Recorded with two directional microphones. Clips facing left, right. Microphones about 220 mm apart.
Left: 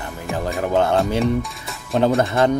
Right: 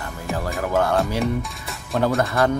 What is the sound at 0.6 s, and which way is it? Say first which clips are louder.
Speech: left 3 dB; 20° left (ahead or behind).